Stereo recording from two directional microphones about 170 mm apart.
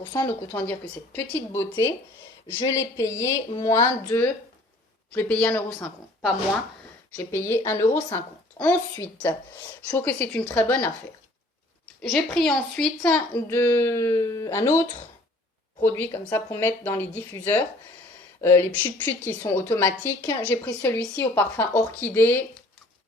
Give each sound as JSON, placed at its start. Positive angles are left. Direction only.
{"t": 0.0, "sound": "speech", "side_deg": 25}
{"t": 0.5, "sound": "a woman's voice", "side_deg": 10}
{"t": 12.0, "sound": "a woman's voice", "side_deg": 0}